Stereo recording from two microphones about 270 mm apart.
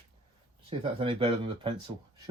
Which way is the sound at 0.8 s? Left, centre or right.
Centre.